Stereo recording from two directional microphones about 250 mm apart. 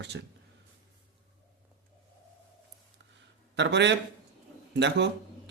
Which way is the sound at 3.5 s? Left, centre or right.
Right.